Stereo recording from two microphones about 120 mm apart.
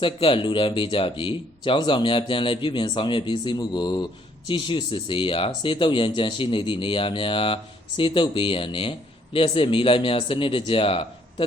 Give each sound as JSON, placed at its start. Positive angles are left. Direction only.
{"t": 0.0, "sound": "speech", "side_deg": 45}